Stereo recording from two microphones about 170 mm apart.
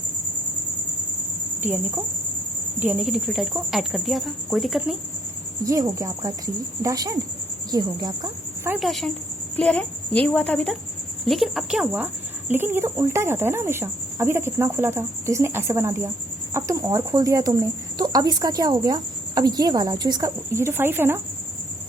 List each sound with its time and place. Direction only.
2.8 s speech: 5° right (ahead or behind)
5.6 s speech: 20° right (ahead or behind)
8.8 s a woman's voice: centre (ahead or behind)